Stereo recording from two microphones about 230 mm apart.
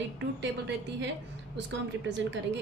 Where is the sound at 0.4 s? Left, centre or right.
Right.